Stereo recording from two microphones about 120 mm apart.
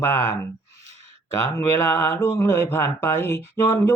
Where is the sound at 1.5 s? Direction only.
20° left (ahead or behind).